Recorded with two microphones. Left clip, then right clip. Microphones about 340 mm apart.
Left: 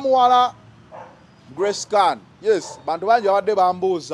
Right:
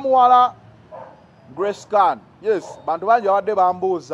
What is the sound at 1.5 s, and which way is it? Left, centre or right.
A man's voice, centre.